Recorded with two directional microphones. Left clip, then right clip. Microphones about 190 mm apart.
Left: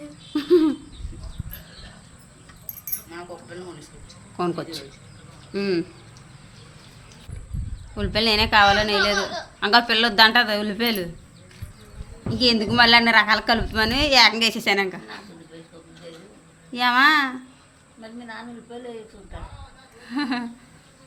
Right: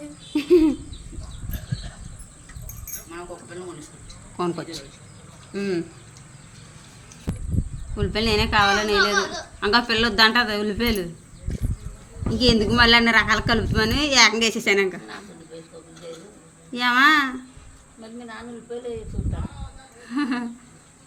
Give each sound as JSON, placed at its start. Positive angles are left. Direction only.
{"t": 0.3, "sound": "a sound", "side_deg": 0}
{"t": 4.4, "sound": "a woman's voice", "side_deg": 10}
{"t": 7.9, "sound": "a woman's voice", "side_deg": 15}
{"t": 12.3, "sound": "a woman's voice", "side_deg": 10}
{"t": 16.7, "sound": "a woman's voice", "side_deg": 5}
{"t": 20.1, "sound": "a woman's voice", "side_deg": 10}